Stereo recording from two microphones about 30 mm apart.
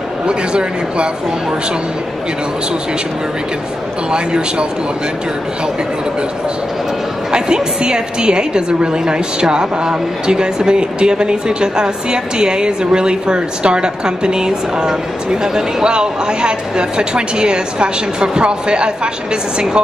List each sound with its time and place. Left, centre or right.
0.3 s speech: right
4.1 s a woman's voice: right
7.2 s a woman's voice: right